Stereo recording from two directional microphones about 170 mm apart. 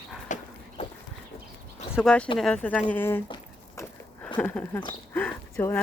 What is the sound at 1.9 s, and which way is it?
Speech, 5° left (ahead or behind).